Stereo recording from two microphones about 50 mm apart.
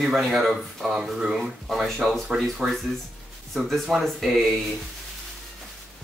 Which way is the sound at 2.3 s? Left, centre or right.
Right.